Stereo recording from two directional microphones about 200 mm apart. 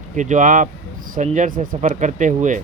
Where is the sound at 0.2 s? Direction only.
40° right (ahead or behind).